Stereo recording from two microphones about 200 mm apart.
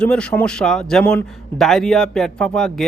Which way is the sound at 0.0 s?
5° left (ahead or behind).